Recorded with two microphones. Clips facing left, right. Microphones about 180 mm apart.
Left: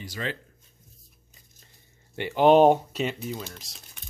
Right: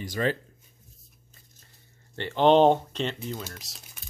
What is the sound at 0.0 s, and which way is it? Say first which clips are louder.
Speech: right 6 dB; 45° right (ahead or behind).